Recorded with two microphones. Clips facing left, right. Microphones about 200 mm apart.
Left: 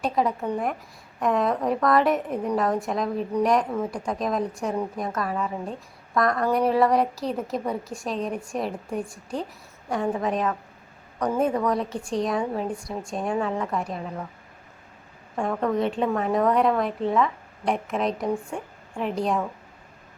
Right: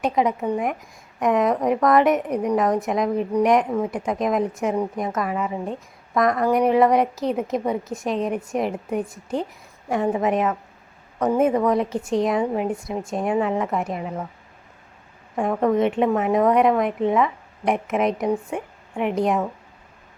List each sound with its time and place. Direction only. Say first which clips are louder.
0.0 s a woman's voice: right 3 dB; 20° right (ahead or behind)
15.4 s a woman's voice: right 5 dB; 20° right (ahead or behind)